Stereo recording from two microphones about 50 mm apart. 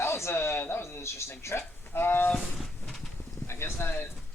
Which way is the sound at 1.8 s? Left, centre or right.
Left.